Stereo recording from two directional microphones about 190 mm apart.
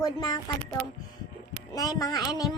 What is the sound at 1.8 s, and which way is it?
Speech, 20° left (ahead or behind).